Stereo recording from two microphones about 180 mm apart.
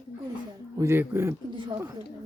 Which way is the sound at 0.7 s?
15° right (ahead or behind).